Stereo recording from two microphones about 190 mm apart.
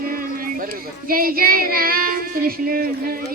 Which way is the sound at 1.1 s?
50° right (ahead or behind).